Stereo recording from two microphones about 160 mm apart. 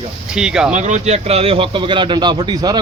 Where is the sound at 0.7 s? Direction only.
50° right (ahead or behind).